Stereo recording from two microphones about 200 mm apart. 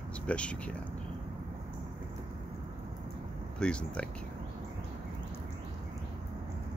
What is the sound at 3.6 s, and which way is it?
Speech, 5° left (ahead or behind).